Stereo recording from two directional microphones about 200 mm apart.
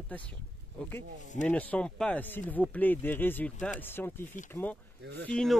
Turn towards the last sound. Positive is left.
turn(degrees=5)  # may be behind; listen again after turning